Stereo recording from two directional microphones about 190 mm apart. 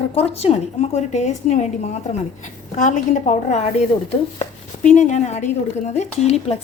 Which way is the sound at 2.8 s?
40° left (ahead or behind).